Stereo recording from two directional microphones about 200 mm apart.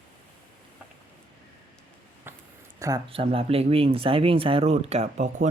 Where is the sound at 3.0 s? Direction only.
30° right (ahead or behind).